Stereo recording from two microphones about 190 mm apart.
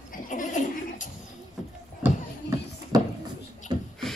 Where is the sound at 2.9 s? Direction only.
20° right (ahead or behind).